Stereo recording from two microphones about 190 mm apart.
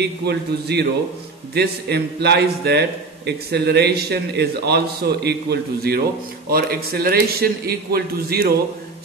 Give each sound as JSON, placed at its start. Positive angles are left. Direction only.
{"t": 0.0, "sound": "a man's voice", "side_deg": -60}